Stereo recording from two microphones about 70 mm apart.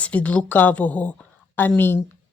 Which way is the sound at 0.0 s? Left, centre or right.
Centre.